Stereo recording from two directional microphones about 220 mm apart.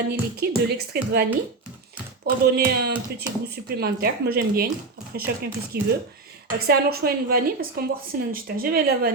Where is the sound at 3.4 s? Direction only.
45° right (ahead or behind).